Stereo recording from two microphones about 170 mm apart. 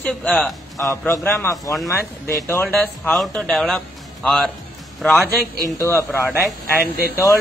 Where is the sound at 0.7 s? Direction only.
20° left (ahead or behind).